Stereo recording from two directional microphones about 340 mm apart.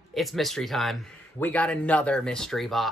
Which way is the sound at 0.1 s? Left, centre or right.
Centre.